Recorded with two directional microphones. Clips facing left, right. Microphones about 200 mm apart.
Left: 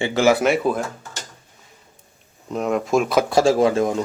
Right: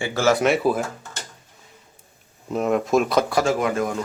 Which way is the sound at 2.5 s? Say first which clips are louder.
Even; centre (ahead or behind).